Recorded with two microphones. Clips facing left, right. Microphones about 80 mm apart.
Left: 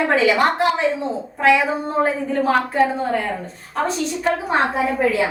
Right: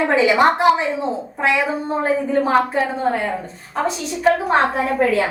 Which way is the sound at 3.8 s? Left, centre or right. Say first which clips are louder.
Even; centre.